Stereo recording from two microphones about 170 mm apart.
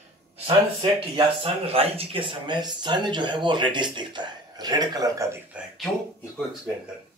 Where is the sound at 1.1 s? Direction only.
35° right (ahead or behind).